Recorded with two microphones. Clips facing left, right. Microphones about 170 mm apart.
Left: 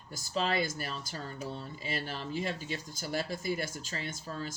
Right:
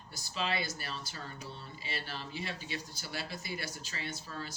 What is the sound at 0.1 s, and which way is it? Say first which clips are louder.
Speech: left 4 dB; 45° left (ahead or behind).